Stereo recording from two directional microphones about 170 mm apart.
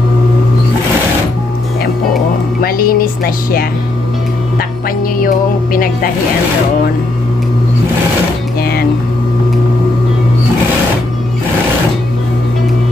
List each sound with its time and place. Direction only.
2.6 s music: 60° left (ahead or behind)
5.2 s music: 55° left (ahead or behind)